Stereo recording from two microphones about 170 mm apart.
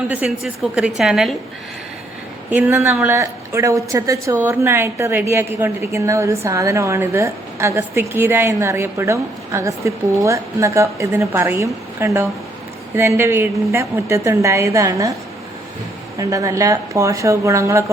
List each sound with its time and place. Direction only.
0.1 s a woman's voice: 5° right (ahead or behind)
2.5 s a woman's voice: 10° right (ahead or behind)
16.1 s speech: 20° right (ahead or behind)